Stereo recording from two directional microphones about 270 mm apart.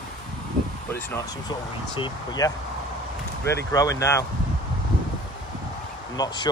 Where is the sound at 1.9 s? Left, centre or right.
Centre.